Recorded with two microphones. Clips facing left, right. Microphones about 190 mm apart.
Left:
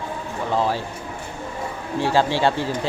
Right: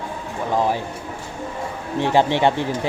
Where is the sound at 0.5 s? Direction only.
15° right (ahead or behind).